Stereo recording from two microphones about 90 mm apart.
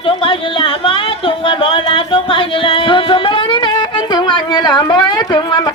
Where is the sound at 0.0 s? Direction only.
75° left (ahead or behind).